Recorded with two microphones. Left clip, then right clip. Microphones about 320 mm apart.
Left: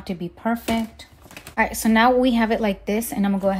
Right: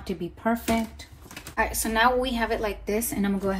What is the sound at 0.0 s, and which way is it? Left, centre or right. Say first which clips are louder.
Speech: left 1 dB; left.